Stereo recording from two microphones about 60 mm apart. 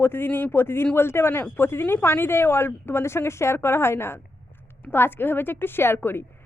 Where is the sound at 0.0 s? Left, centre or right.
Left.